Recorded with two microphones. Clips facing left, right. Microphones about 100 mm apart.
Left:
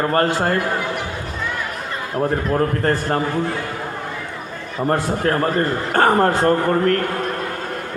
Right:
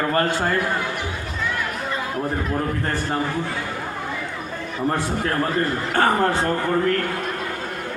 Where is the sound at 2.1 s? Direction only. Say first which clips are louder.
Left 9 dB; 40° left (ahead or behind).